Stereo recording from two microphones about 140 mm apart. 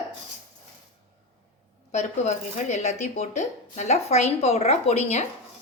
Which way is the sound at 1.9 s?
55° left (ahead or behind).